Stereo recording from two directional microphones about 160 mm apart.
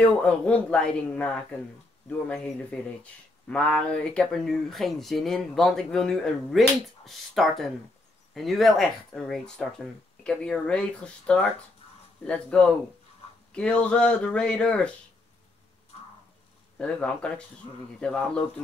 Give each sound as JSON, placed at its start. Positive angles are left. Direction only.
{"t": 0.0, "sound": "speech", "side_deg": 5}
{"t": 16.7, "sound": "speech", "side_deg": 5}